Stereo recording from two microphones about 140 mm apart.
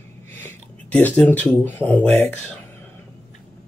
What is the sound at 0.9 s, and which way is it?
Speech, 10° left (ahead or behind).